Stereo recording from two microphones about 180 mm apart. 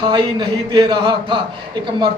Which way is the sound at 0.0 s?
25° right (ahead or behind).